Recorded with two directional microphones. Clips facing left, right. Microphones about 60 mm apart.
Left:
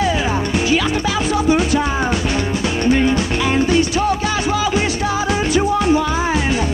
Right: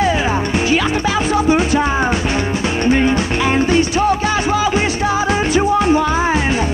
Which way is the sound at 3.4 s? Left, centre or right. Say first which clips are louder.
Right 1 dB; right.